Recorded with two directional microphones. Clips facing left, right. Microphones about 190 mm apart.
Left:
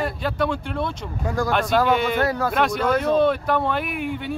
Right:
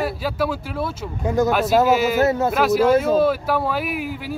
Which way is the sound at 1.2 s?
20° right (ahead or behind).